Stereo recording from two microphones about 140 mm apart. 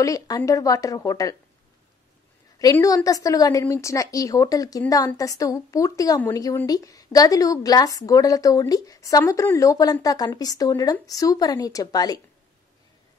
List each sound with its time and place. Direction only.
0.0 s speech: 25° left (ahead or behind)
2.6 s speech: 25° left (ahead or behind)